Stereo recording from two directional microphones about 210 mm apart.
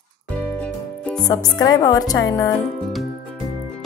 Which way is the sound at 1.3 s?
15° left (ahead or behind).